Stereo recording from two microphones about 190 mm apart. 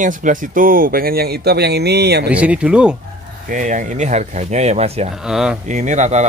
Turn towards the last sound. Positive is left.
turn(degrees=-40)  # may be behind; listen again after turning